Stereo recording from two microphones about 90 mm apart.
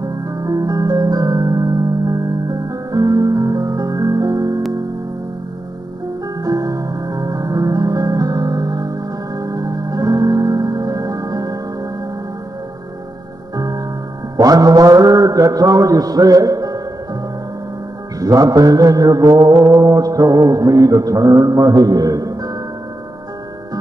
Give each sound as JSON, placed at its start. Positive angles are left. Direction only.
{"t": 0.3, "sound": "music", "side_deg": -40}
{"t": 6.4, "sound": "music", "side_deg": -40}
{"t": 14.3, "sound": "mantra", "side_deg": -45}
{"t": 18.2, "sound": "mantra", "side_deg": -40}